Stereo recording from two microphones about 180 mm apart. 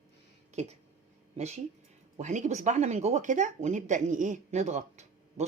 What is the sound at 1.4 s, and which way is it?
Speech, 35° right (ahead or behind).